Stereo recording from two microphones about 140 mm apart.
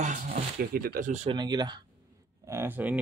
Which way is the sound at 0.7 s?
90° right.